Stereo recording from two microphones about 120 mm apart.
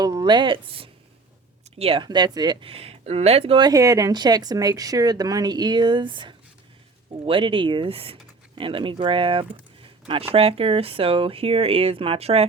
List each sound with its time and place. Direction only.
0.0 s speech: 35° right (ahead or behind); by 2.0 s 50° right (ahead or behind)
2.0 s speech: 35° right (ahead or behind); by 3.6 s 55° right (ahead or behind)
3.6 s speech: 30° right (ahead or behind); by 12.5 s 60° right (ahead or behind)